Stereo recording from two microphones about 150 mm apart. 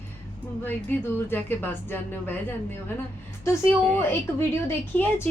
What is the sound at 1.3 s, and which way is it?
Speech, 15° left (ahead or behind).